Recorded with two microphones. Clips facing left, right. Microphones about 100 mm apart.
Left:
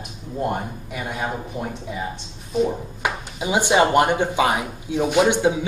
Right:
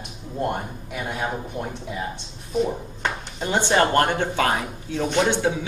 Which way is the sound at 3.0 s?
10° left (ahead or behind).